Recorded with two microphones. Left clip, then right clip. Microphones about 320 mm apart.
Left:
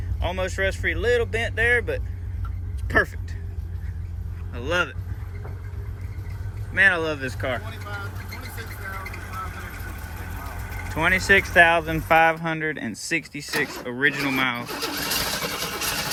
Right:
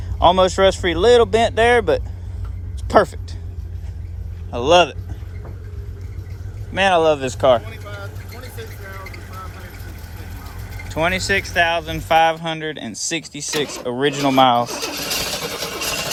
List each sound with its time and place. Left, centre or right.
0.2 s speech: centre
6.7 s speech: centre
10.9 s speech: centre